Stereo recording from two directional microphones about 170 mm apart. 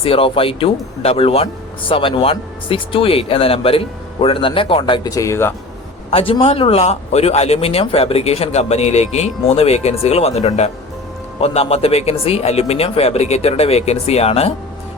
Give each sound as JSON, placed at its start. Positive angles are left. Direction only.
{"t": 0.0, "sound": "speech", "side_deg": 35}
{"t": 6.1, "sound": "speech", "side_deg": 35}